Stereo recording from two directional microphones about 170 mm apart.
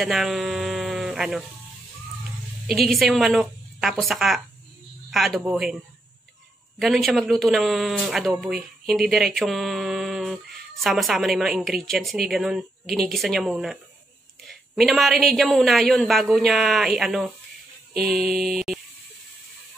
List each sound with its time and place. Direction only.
0.0 s speech: centre (ahead or behind)
2.6 s speech: centre (ahead or behind)
6.8 s speech: centre (ahead or behind)
14.8 s speech: centre (ahead or behind)